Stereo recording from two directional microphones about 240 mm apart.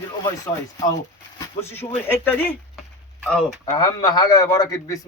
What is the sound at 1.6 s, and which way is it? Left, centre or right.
A man's voice, centre.